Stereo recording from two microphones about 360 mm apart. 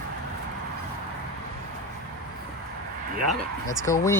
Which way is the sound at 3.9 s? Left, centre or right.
Centre.